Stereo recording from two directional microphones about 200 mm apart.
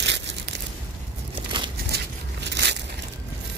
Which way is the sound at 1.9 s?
60° right (ahead or behind).